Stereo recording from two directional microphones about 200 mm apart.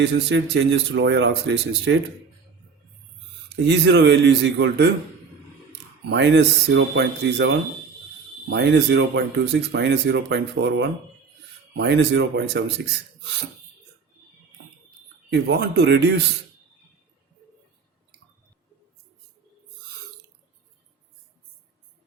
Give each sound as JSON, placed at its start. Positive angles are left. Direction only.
{"t": 0.0, "sound": "speech", "side_deg": -60}
{"t": 3.6, "sound": "speech", "side_deg": -60}
{"t": 6.1, "sound": "speech", "side_deg": -60}
{"t": 15.3, "sound": "speech", "side_deg": -55}